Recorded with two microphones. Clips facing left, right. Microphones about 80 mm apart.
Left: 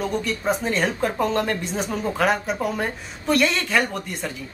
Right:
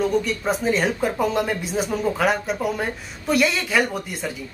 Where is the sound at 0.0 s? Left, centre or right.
Centre.